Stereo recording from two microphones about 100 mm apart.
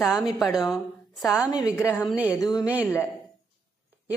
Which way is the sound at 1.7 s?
25° left (ahead or behind).